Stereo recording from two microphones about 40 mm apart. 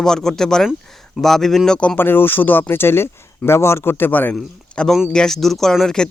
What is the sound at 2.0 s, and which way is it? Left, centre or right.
Speech, left.